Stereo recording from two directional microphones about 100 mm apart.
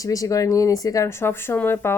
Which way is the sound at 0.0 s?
35° left (ahead or behind).